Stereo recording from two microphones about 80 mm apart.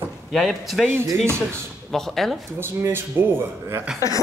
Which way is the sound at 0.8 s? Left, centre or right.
Right.